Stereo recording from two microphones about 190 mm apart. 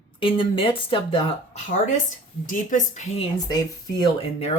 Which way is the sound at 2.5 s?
40° left (ahead or behind).